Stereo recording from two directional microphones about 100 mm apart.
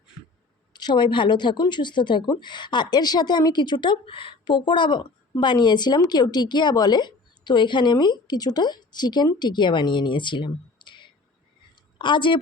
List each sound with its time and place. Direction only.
0.7 s a woman's voice: 45° left (ahead or behind)